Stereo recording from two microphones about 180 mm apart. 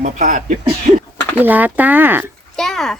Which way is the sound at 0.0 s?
45° right (ahead or behind).